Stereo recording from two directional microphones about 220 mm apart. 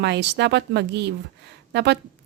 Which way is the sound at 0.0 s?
50° right (ahead or behind).